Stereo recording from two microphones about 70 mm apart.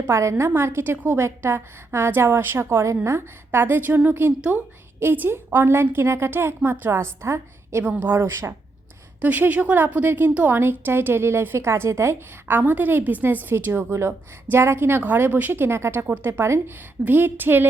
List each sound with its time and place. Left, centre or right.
0.0 s a woman's voice: right; by 4.6 s centre
4.9 s a woman's voice: right
7.9 s a woman's voice: right
8.2 s a woman's voice: right
9.2 s a woman's voice: right
16.0 s a woman's voice: right